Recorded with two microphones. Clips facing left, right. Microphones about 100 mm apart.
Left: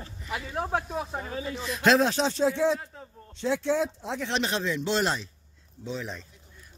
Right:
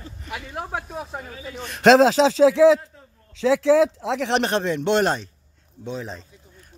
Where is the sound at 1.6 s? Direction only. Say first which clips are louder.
Right 8 dB; 85° right; by 5.2 s 55° right (ahead or behind).